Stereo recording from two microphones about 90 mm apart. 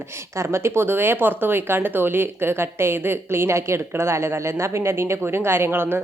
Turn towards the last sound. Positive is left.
turn(degrees=-25)  # may be behind; listen again after turning